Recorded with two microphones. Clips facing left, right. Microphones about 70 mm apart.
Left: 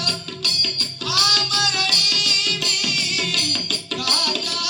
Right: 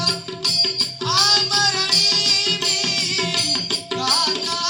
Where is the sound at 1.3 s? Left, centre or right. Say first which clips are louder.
Right 2 dB; right.